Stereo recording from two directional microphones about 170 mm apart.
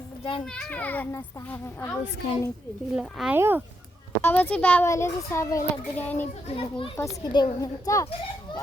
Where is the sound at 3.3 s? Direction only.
10° right (ahead or behind).